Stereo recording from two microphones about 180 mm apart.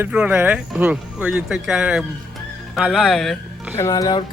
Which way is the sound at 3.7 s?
15° left (ahead or behind).